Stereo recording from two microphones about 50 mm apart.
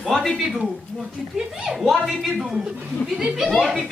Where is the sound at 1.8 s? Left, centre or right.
Centre.